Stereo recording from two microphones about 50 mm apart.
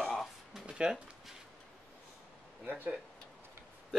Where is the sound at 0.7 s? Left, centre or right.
Centre.